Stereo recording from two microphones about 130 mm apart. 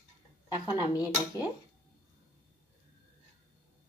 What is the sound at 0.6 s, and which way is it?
Speech, 30° left (ahead or behind).